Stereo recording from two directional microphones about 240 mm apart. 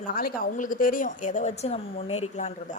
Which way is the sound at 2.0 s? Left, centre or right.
Left.